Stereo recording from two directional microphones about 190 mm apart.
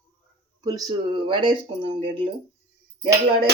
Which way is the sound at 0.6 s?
20° right (ahead or behind).